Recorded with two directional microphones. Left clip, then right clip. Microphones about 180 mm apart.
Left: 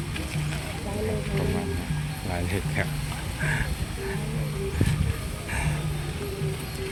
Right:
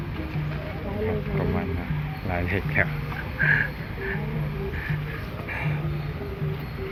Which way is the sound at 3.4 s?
20° left (ahead or behind).